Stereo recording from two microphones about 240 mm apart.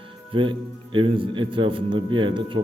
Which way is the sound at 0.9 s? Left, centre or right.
Right.